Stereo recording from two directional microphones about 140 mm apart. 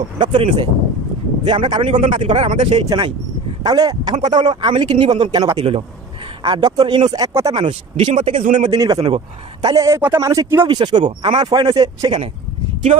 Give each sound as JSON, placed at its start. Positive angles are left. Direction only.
{"t": 0.2, "sound": "speech", "side_deg": -35}
{"t": 2.9, "sound": "a man's voice", "side_deg": -30}
{"t": 5.6, "sound": "speech", "side_deg": -45}
{"t": 6.4, "sound": "a man's voice", "side_deg": -35}
{"t": 7.6, "sound": "speech", "side_deg": -50}
{"t": 8.6, "sound": "a man's voice", "side_deg": -25}
{"t": 10.7, "sound": "speech", "side_deg": -30}